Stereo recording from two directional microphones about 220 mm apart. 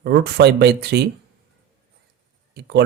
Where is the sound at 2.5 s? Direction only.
50° right (ahead or behind).